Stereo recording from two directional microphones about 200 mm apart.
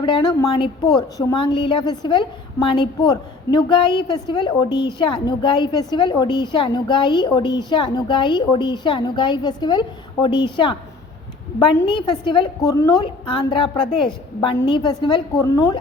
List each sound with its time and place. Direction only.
0.0 s a woman's voice: 25° left (ahead or behind)